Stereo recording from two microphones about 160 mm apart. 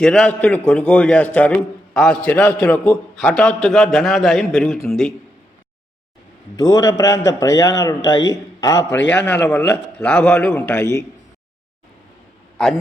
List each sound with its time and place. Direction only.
0.0 s a man's voice: 5° left (ahead or behind)
6.6 s a man's voice: 25° left (ahead or behind)
9.2 s a man's voice: 10° left (ahead or behind)